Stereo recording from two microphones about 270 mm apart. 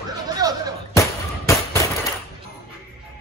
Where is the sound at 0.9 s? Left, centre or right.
Centre.